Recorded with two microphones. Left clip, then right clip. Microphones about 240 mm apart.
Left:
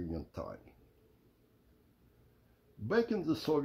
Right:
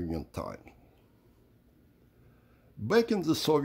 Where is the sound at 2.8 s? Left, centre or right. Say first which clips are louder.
Right 6 dB; right.